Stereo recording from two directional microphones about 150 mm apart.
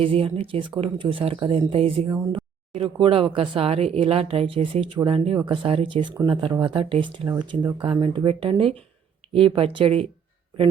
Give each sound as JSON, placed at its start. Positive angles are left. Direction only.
{"t": 0.0, "sound": "speech", "side_deg": -40}
{"t": 2.0, "sound": "speech", "side_deg": -20}
{"t": 2.3, "sound": "speech", "side_deg": -35}